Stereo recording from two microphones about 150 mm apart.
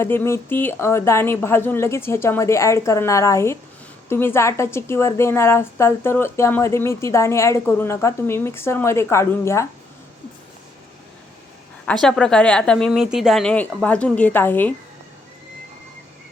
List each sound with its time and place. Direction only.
0.0 s a woman's voice: 15° left (ahead or behind)
12.0 s a woman's voice: 5° left (ahead or behind)